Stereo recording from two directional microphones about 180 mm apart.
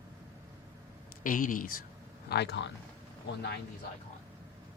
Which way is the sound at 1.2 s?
50° left (ahead or behind).